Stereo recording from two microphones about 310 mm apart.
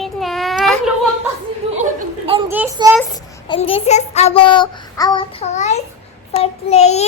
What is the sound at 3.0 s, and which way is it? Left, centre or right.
A child's voice, centre.